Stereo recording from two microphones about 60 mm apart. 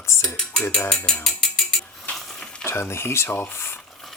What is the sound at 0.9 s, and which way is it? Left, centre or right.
Ratchet, centre.